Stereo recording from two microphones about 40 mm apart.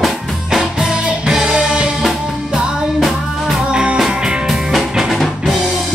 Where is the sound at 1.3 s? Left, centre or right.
Centre.